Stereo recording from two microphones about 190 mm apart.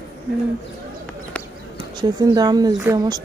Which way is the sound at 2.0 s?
20° right (ahead or behind).